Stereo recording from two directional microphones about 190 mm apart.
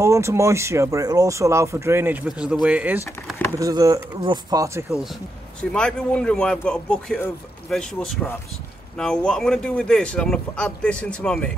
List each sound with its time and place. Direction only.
0.0 s speech: 15° right (ahead or behind)
5.6 s speech: 5° left (ahead or behind)